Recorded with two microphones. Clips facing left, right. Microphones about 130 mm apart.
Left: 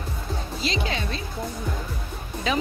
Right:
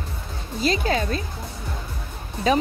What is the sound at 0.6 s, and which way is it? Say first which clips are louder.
Speech: right 7 dB; 45° right (ahead or behind).